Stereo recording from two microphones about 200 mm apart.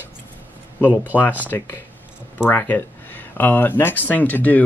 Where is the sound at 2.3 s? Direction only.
10° left (ahead or behind).